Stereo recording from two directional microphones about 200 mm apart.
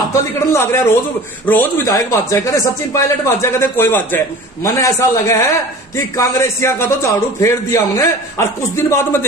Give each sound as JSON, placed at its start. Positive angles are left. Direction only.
{"t": 0.1, "sound": "a man's voice", "side_deg": 15}